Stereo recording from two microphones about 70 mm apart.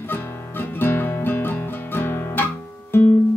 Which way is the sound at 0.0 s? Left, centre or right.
Left.